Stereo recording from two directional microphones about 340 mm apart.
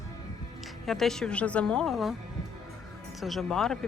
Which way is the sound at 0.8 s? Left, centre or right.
Centre.